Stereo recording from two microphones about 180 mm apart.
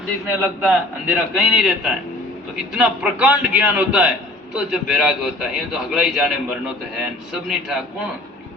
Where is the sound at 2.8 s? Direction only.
5° right (ahead or behind).